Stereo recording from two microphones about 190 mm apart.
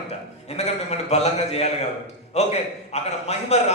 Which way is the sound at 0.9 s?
35° left (ahead or behind).